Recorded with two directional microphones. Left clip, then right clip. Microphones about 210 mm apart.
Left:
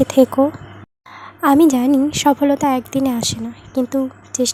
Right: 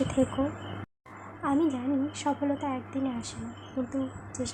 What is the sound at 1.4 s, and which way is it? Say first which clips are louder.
A woman's voice: left 15 dB; 45° left (ahead or behind).